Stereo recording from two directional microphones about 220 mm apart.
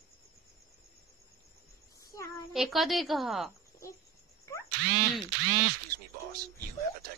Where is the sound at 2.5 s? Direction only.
Centre (ahead or behind).